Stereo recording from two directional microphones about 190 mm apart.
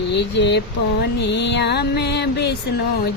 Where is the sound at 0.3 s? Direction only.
65° left (ahead or behind).